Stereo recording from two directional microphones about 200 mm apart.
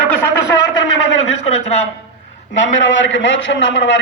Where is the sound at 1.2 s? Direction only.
30° left (ahead or behind).